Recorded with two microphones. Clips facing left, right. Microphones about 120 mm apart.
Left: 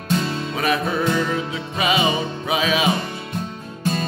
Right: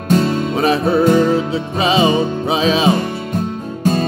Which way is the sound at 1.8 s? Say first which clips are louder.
Right 6 dB; 30° right (ahead or behind).